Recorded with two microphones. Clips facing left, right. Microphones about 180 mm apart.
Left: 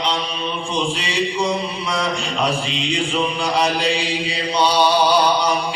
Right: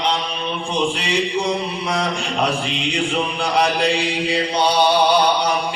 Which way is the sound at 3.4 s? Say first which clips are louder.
Right 3 dB; 60° right (ahead or behind).